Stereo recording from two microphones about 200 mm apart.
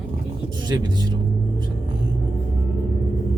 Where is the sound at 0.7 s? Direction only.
20° right (ahead or behind).